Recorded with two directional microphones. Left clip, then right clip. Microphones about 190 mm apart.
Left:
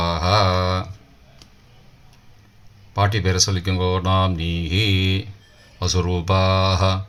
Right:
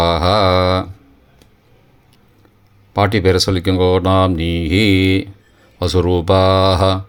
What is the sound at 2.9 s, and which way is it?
Speech, 45° right (ahead or behind).